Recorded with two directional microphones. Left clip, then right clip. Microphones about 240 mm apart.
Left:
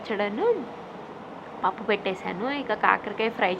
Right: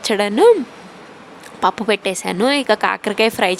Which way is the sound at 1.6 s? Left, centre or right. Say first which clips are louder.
Right 9 dB; right.